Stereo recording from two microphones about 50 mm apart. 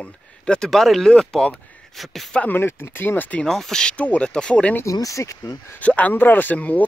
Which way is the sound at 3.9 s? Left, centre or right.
Left.